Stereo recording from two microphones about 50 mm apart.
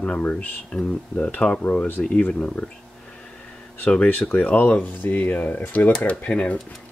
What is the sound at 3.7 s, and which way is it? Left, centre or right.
Speech, left.